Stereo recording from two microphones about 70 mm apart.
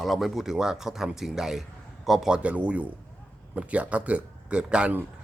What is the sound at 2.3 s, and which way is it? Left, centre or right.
Speech, centre.